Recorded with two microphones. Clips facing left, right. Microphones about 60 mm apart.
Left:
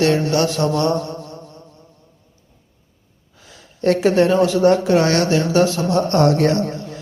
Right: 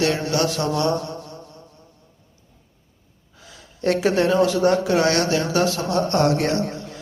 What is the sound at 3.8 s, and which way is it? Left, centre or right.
A man's voice, left.